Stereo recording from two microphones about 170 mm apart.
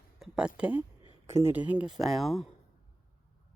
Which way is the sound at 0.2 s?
5° right (ahead or behind).